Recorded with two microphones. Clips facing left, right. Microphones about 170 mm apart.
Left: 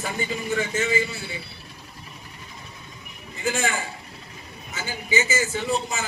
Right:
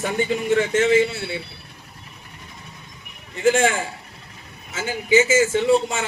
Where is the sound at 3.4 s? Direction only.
90° right.